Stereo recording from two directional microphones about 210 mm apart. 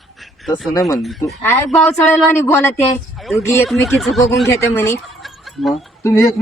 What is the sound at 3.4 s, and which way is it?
Speech, 15° left (ahead or behind).